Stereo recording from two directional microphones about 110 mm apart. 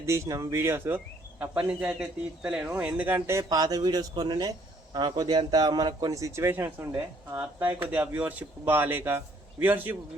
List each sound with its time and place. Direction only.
0.0 s speech: 25° right (ahead or behind)
3.6 s a man's voice: 35° right (ahead or behind); by 9.9 s 15° right (ahead or behind)